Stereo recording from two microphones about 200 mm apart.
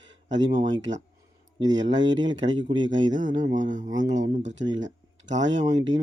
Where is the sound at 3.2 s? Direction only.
40° right (ahead or behind).